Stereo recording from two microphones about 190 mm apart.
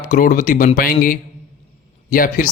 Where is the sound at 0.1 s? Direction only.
45° left (ahead or behind).